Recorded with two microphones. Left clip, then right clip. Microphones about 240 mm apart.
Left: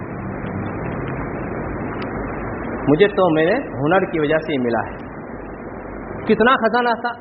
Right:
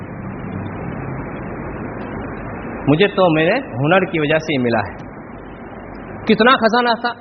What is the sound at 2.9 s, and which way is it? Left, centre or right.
A man's voice, right.